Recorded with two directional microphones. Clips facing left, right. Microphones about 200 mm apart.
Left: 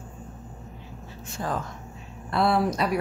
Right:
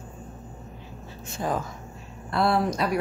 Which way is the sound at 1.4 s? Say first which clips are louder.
Right 2 dB; 10° right (ahead or behind).